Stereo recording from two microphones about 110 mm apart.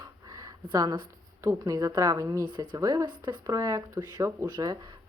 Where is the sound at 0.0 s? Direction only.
35° right (ahead or behind).